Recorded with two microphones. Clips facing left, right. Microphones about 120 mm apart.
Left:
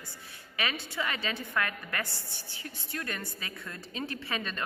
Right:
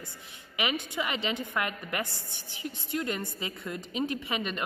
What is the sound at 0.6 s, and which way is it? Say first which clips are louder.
A woman's voice: right 3 dB; 15° right (ahead or behind).